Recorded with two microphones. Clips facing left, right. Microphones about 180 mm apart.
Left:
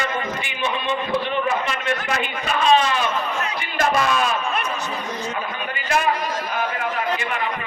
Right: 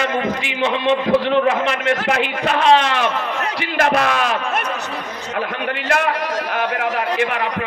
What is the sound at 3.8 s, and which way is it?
Speech, 70° right (ahead or behind).